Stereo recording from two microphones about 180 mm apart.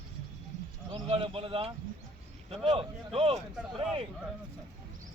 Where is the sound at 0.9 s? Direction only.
30° right (ahead or behind).